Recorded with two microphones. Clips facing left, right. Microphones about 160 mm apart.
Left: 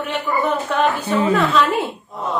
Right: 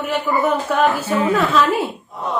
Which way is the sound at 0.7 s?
5° right (ahead or behind).